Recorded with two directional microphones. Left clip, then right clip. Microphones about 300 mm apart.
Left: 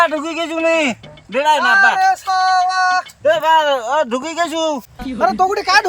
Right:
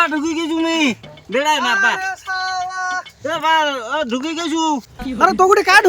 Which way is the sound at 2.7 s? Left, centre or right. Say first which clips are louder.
Left 7 dB; left.